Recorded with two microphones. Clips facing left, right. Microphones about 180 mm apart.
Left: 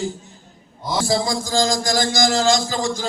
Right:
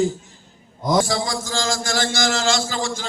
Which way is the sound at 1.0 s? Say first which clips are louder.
Left 3 dB; 30° left (ahead or behind).